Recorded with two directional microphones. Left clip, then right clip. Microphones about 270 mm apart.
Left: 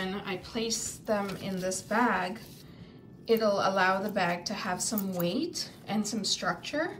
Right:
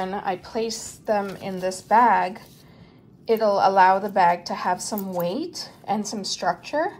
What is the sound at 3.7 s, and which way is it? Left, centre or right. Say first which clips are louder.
A woman's voice: right 10 dB; centre.